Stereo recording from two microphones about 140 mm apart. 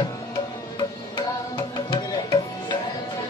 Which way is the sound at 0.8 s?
30° left (ahead or behind).